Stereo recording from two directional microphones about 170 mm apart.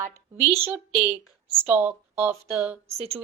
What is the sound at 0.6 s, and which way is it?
A woman's voice, 5° right (ahead or behind).